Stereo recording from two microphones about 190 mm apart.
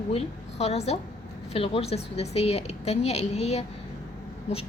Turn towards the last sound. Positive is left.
turn(degrees=35)  # may be behind; listen again after turning